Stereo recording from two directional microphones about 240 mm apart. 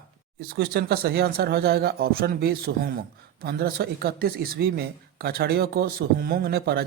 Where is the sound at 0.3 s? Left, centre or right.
Right.